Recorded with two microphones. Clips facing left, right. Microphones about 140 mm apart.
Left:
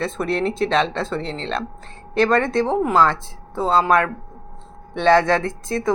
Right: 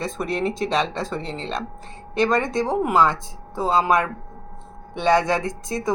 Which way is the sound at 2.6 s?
10° right (ahead or behind).